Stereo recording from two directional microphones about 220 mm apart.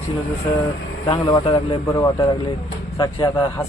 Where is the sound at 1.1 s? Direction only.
15° left (ahead or behind).